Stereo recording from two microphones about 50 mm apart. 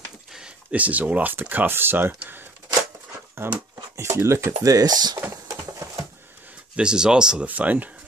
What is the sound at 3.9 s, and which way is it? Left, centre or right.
Speech, right.